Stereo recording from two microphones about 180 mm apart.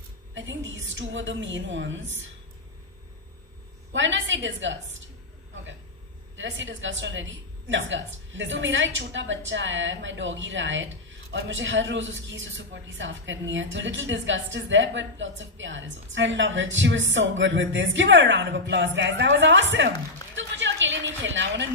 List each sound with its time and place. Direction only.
0.3 s a woman's voice: 90° right
3.9 s a woman's voice: 90° right
6.3 s a woman's voice: 90° right
18.9 s a woman's voice: 75° right (ahead or behind)
20.3 s a sound: 90° right